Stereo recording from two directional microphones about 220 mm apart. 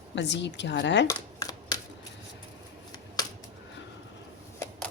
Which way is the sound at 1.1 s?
15° left (ahead or behind).